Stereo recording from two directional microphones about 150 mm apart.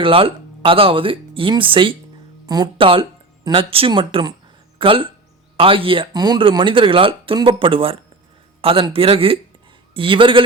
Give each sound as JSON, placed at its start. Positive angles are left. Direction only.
{"t": 0.0, "sound": "speech", "side_deg": -35}